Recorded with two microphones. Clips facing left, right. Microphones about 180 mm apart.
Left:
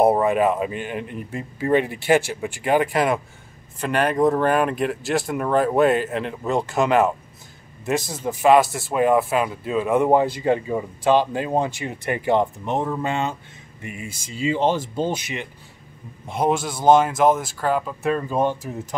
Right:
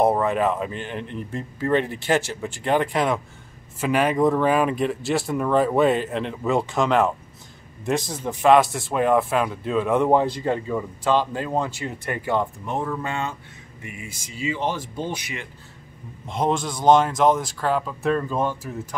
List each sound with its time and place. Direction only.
0.0 s speech: 10° left (ahead or behind)
16.3 s speech: 10° left (ahead or behind)
18.3 s speech: 20° left (ahead or behind)